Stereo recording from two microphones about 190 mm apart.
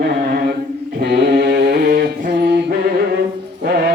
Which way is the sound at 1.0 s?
60° right (ahead or behind).